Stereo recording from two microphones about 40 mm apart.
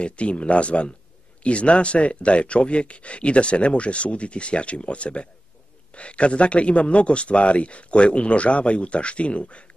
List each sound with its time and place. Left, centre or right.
0.0 s speech: left